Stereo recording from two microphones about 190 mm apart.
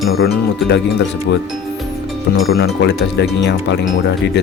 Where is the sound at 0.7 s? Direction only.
65° left (ahead or behind).